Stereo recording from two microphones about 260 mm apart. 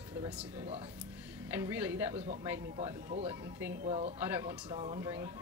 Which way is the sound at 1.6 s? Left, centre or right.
Centre.